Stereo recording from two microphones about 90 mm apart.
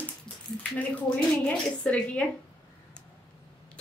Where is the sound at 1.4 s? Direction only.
15° left (ahead or behind).